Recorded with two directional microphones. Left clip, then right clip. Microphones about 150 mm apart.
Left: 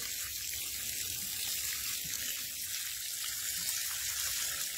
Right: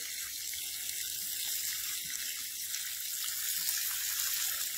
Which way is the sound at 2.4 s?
35° right (ahead or behind).